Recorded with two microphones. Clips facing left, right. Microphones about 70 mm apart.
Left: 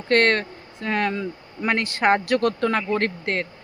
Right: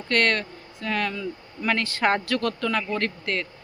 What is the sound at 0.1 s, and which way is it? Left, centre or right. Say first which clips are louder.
Speech: left 4 dB; left.